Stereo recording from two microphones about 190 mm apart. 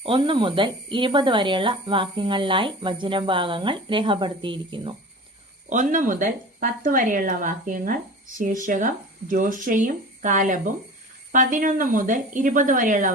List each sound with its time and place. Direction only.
0.0 s speech: 25° right (ahead or behind)
5.6 s speech: 40° right (ahead or behind)